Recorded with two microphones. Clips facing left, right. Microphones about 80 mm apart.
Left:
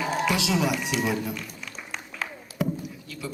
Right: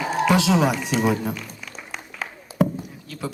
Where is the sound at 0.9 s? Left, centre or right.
Right.